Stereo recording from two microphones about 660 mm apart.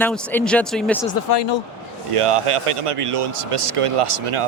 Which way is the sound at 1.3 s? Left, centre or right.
Left.